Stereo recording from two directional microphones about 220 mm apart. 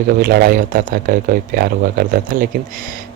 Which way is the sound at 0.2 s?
45° right (ahead or behind).